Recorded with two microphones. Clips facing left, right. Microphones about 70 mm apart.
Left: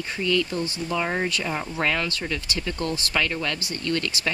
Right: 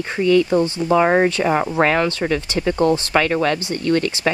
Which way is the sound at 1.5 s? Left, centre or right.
Right.